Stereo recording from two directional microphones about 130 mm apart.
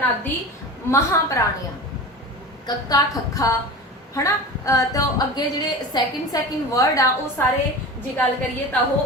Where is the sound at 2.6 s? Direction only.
30° left (ahead or behind).